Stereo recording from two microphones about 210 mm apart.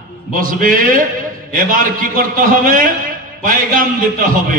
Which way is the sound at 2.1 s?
40° right (ahead or behind).